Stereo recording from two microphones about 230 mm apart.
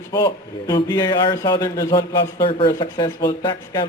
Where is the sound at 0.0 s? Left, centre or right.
Centre.